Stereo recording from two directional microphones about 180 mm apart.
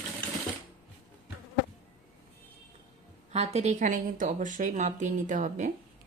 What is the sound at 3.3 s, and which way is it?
Speech, 35° right (ahead or behind).